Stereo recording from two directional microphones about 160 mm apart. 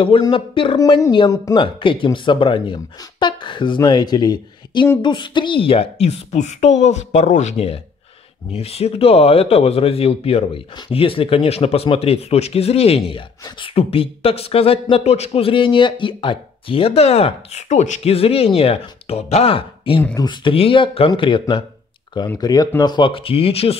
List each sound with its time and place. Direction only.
0.0 s speech: 35° left (ahead or behind)